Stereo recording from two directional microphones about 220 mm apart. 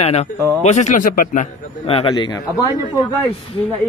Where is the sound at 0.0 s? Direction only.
30° left (ahead or behind).